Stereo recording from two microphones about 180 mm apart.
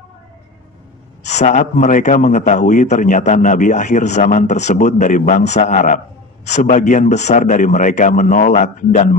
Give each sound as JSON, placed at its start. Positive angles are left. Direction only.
{"t": 1.2, "sound": "a man's voice", "side_deg": 40}